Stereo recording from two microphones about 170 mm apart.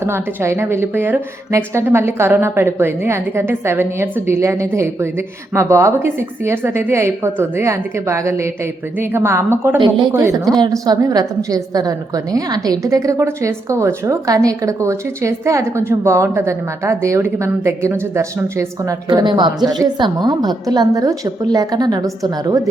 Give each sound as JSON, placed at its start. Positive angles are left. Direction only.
{"t": 0.0, "sound": "a woman's voice", "side_deg": -15}
{"t": 9.7, "sound": "a woman's voice", "side_deg": -25}
{"t": 19.0, "sound": "a woman's voice", "side_deg": -25}